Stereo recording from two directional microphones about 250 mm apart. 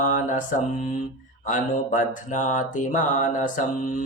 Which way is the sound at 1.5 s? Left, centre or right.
Left.